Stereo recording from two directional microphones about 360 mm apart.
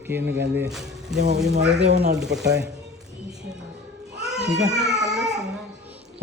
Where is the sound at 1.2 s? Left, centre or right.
Centre.